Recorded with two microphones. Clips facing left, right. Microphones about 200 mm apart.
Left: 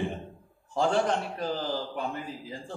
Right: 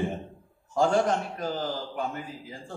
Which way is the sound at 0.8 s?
45° right (ahead or behind).